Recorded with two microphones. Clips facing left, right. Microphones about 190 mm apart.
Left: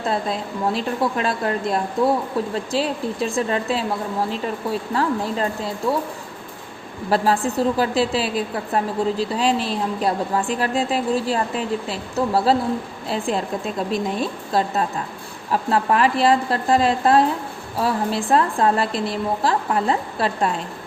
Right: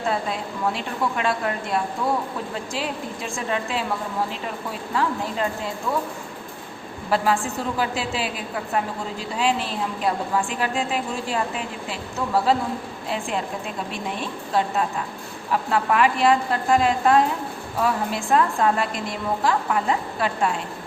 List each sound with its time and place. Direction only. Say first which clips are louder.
0.1 s a woman's voice: left 3 dB; 35° left (ahead or behind)
7.1 s a woman's voice: left 3 dB; 35° left (ahead or behind)